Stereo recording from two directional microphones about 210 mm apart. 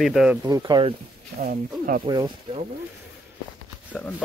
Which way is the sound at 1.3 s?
40° right (ahead or behind).